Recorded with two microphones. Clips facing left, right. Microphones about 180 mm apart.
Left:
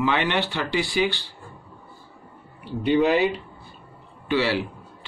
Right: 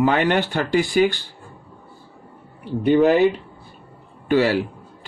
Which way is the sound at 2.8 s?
50° right (ahead or behind).